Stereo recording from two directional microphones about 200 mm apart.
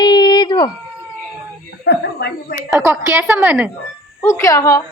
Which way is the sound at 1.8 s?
55° left (ahead or behind).